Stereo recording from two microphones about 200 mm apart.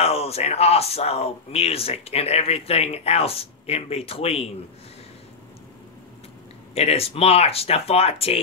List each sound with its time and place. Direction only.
0.0 s speech: 30° left (ahead or behind)
6.7 s speech: 30° left (ahead or behind)